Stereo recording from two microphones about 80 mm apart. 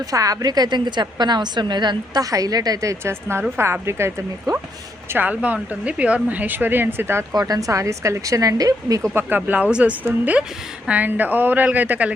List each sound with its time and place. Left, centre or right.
0.1 s a woman's voice: right
2.3 s a woman's voice: right
5.1 s speech: centre
7.3 s a woman's voice: right
9.1 s speech: right